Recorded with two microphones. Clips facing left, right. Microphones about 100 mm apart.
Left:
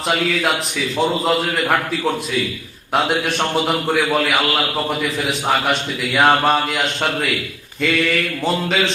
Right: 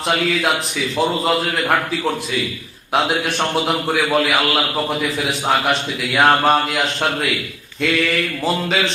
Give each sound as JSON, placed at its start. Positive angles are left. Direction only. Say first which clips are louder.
{"t": 0.1, "sound": "a man's voice", "louder": "even", "side_deg": 0}